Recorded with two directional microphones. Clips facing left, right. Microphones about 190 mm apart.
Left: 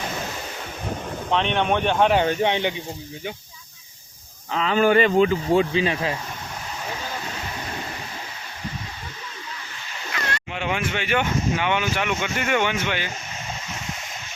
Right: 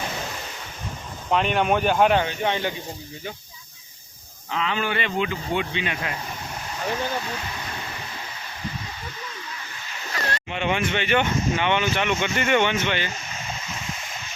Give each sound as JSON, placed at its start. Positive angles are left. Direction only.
{"t": 1.3, "sound": "speech", "side_deg": -5}
{"t": 2.4, "sound": "speech", "side_deg": 20}
{"t": 4.5, "sound": "speech", "side_deg": 40}
{"t": 10.1, "sound": "rowboat", "side_deg": -35}
{"t": 10.5, "sound": "speech", "side_deg": 5}